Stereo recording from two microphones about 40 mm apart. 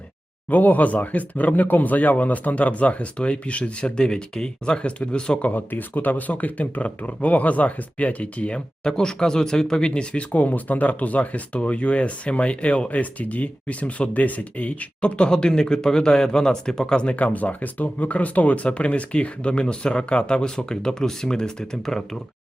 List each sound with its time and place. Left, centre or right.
0.5 s speech: left
5.4 s speech: left
10.3 s speech: left
17.2 s speech: left; by 22.2 s centre